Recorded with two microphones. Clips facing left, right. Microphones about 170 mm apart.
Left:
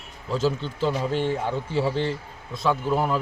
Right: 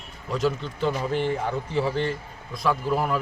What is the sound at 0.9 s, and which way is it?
A man's voice, 30° left (ahead or behind).